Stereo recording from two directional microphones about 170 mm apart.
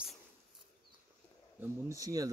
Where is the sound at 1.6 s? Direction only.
20° right (ahead or behind).